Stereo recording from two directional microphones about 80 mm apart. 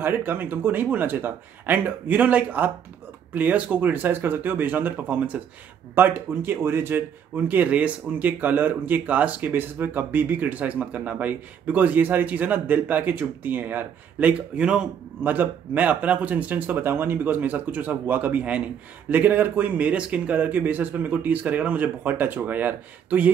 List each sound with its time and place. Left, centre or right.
0.0 s a man's voice: right
15.2 s speech: right